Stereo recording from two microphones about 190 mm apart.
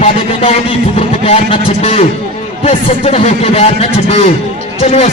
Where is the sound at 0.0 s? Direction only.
30° left (ahead or behind).